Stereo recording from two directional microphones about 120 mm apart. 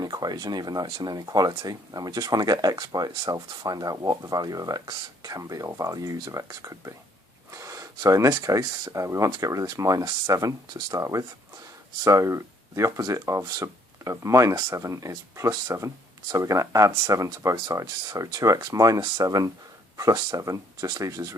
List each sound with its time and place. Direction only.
0.0 s speech: 35° right (ahead or behind)